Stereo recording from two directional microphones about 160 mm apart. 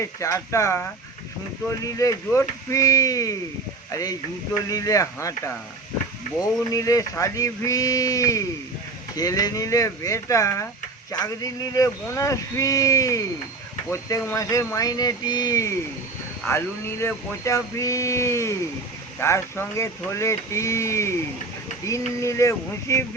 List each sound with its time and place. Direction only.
0.0 s speech: 20° left (ahead or behind)
4.7 s speech: 20° left (ahead or behind)
16.5 s a sound: 15° left (ahead or behind)
21.8 s speech: 20° left (ahead or behind)